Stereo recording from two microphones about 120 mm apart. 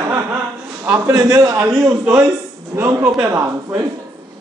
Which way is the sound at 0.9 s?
30° right (ahead or behind).